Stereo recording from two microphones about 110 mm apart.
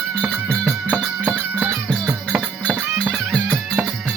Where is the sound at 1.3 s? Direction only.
15° right (ahead or behind).